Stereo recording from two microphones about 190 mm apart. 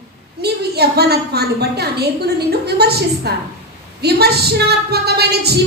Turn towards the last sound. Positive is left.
turn(degrees=-55)  # may be behind; listen again after turning